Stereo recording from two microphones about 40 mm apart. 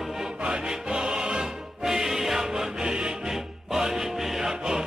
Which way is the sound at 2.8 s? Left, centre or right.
Centre.